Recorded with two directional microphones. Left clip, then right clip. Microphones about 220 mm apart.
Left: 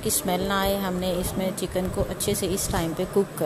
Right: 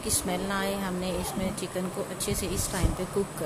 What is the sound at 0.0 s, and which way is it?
Speech, 20° left (ahead or behind).